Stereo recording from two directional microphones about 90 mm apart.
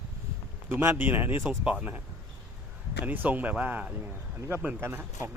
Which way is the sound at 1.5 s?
10° right (ahead or behind).